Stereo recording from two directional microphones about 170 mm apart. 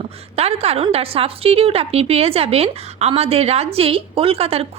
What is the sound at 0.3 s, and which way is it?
A woman's voice, 35° right (ahead or behind).